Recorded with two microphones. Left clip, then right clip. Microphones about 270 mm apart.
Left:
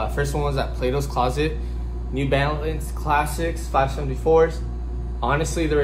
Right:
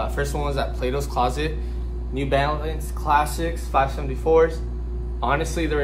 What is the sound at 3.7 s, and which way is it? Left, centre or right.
Speech, centre.